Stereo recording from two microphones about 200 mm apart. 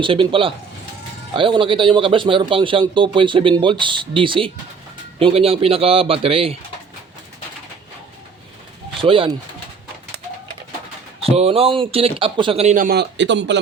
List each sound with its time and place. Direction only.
0.0 s a man's voice: 25° right (ahead or behind)
9.0 s speech: 25° right (ahead or behind)
11.2 s a man's voice: 30° right (ahead or behind)
12.7 s speech: 45° right (ahead or behind)